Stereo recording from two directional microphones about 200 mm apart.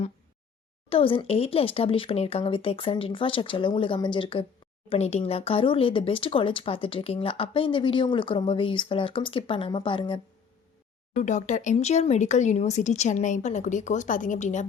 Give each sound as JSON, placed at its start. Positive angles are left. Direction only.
{"t": 0.9, "sound": "speech", "side_deg": 30}
{"t": 11.2, "sound": "speech", "side_deg": 35}